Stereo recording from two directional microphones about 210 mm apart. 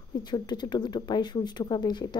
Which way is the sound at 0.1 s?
20° left (ahead or behind).